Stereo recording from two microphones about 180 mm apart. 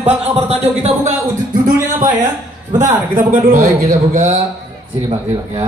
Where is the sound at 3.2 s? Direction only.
45° right (ahead or behind).